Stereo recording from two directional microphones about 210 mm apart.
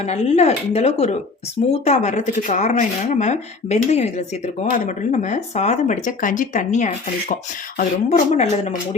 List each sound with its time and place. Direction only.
0.0 s speech: 30° left (ahead or behind)